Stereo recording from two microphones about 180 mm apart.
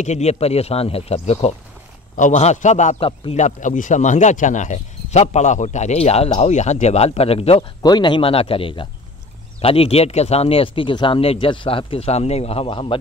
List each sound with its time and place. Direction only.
0.0 s speech: 40° left (ahead or behind)